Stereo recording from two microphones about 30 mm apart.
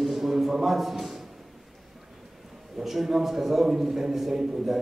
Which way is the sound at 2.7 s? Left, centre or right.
Centre.